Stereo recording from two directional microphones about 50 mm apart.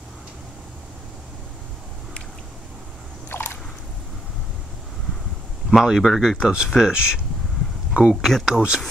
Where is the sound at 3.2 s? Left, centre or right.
Left.